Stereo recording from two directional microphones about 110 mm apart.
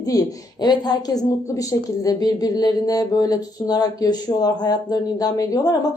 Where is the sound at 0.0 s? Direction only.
35° left (ahead or behind).